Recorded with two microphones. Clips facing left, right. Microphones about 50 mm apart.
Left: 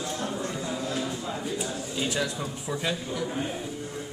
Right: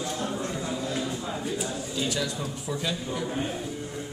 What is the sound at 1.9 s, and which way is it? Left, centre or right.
Speech, left.